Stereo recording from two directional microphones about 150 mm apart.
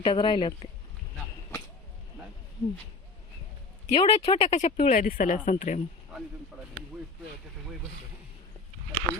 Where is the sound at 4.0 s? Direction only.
45° left (ahead or behind).